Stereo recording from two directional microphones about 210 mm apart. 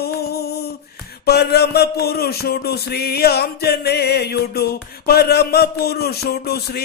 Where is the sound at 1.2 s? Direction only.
50° left (ahead or behind).